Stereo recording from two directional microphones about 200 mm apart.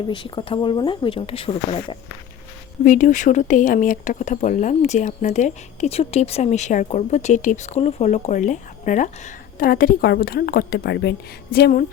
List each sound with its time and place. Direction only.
0.1 s speech: 25° left (ahead or behind)
2.8 s a woman's voice: 40° left (ahead or behind)